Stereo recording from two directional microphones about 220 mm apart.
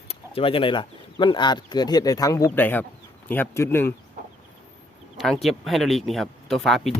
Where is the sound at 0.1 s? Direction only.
25° left (ahead or behind).